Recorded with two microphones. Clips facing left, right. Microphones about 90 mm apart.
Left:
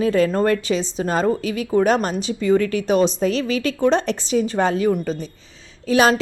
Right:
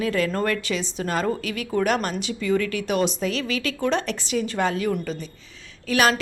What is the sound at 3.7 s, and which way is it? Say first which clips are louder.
Speech: left 7 dB; 20° left (ahead or behind).